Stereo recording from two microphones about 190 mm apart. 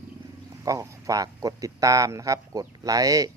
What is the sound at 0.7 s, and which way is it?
Speech, 20° right (ahead or behind).